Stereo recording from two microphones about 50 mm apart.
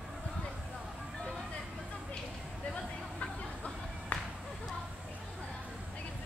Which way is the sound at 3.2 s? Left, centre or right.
Left.